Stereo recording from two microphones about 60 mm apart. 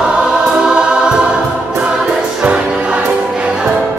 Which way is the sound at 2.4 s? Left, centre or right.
Centre.